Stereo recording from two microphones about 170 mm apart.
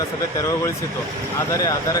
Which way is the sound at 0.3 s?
20° left (ahead or behind).